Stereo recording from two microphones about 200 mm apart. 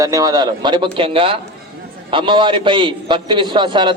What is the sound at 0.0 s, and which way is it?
A man's voice, 15° right (ahead or behind).